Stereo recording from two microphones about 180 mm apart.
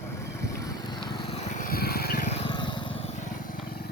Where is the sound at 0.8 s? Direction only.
25° left (ahead or behind).